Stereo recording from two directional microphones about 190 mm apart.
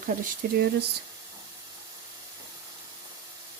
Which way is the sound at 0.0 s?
50° right (ahead or behind).